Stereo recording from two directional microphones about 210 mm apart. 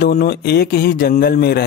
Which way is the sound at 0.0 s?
50° left (ahead or behind).